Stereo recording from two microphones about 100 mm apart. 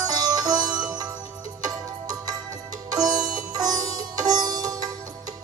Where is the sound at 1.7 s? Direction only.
40° right (ahead or behind).